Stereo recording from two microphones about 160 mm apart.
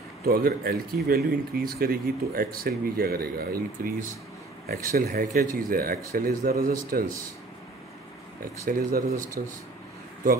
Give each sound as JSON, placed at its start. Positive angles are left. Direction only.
{"t": 0.2, "sound": "speech", "side_deg": -70}
{"t": 8.6, "sound": "speech", "side_deg": -60}